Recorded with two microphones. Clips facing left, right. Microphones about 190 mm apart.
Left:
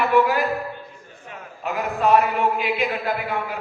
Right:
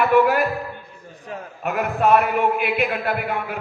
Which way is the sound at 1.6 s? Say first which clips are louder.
Right 2 dB; 55° right (ahead or behind).